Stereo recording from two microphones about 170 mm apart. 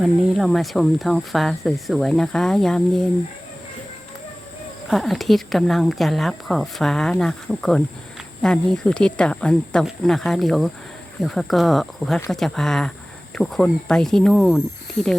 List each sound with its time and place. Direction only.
0.0 s speech: centre (ahead or behind)
4.9 s speech: centre (ahead or behind)